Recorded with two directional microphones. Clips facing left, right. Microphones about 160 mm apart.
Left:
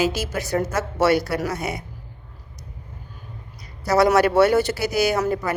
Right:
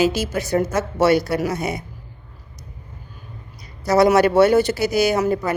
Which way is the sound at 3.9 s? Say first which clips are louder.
Right 2 dB; 20° right (ahead or behind).